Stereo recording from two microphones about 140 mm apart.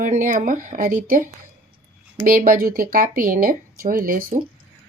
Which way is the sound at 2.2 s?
90° right.